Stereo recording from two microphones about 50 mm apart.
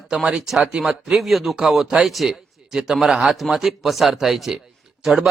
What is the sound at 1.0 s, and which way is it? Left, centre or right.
A man's voice, centre.